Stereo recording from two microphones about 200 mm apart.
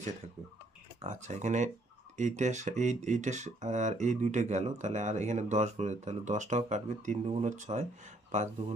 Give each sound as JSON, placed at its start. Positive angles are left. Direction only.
{"t": 1.0, "sound": "speech", "side_deg": -35}